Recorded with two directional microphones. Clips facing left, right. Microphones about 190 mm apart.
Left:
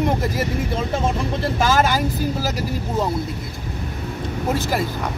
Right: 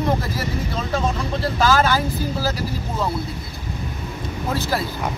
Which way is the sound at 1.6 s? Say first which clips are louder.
Right 1 dB; 20° left (ahead or behind).